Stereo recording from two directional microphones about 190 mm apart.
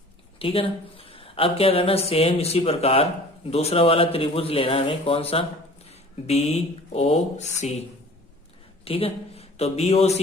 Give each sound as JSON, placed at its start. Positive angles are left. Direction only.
{"t": 0.3, "sound": "speech", "side_deg": 30}
{"t": 8.8, "sound": "speech", "side_deg": 30}